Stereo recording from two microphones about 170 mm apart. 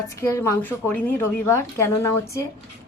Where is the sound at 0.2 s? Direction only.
15° left (ahead or behind).